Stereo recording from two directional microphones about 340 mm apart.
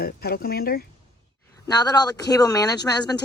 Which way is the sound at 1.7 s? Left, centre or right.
Centre.